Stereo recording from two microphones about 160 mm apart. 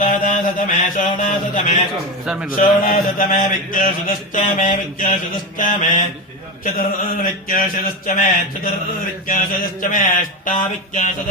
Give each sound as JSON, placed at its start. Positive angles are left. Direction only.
{"t": 0.0, "sound": "mantra", "side_deg": 55}
{"t": 2.2, "sound": "a man's voice", "side_deg": -5}
{"t": 2.6, "sound": "mantra", "side_deg": 55}